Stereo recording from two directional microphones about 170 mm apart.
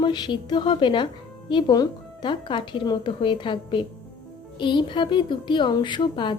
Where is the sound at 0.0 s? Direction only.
25° left (ahead or behind).